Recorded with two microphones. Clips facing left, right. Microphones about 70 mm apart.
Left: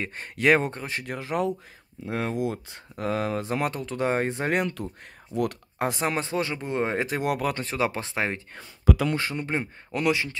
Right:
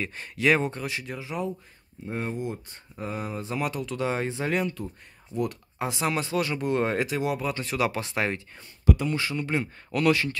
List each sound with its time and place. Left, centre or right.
0.0 s speech: left
1.0 s speech: left
2.0 s speech: left
3.4 s speech: left
6.0 s speech: left
7.1 s speech: left
7.6 s speech: left
9.1 s speech: left
9.9 s speech: centre